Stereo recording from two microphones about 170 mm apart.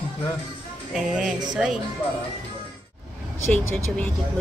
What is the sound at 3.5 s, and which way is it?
Speech, 10° left (ahead or behind).